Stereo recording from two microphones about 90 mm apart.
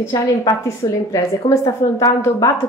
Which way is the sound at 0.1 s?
45° left (ahead or behind).